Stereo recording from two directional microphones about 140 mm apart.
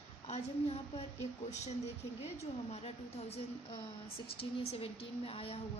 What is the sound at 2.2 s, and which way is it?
A woman's voice, 50° left (ahead or behind).